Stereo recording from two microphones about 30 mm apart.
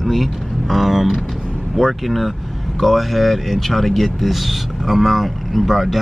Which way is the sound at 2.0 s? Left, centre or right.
Centre.